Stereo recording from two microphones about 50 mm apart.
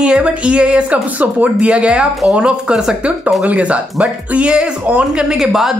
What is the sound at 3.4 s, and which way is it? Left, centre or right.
Speech, right.